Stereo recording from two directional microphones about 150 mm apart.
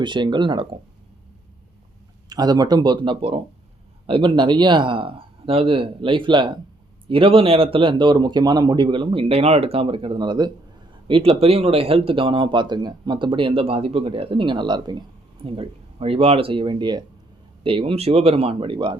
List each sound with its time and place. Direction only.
0.0 s speech: 30° right (ahead or behind)
2.3 s speech: 25° right (ahead or behind)